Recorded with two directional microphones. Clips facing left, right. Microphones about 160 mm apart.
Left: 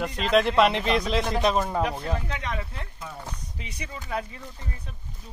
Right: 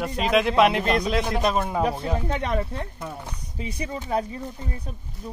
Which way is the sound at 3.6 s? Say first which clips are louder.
Right 12 dB; 30° right (ahead or behind).